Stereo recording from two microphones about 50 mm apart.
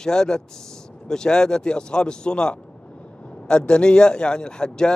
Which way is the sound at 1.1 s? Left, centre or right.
Centre.